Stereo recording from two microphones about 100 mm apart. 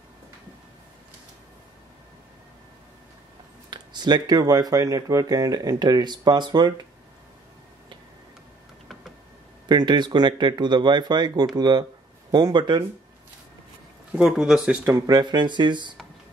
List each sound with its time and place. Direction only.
3.7 s speech: 45° right (ahead or behind)
9.7 s speech: 45° right (ahead or behind)
14.1 s speech: 5° right (ahead or behind)
15.0 s speech: 45° right (ahead or behind)